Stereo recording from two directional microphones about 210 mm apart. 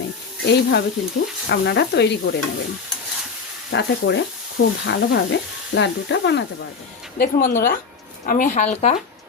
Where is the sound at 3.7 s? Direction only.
55° left (ahead or behind).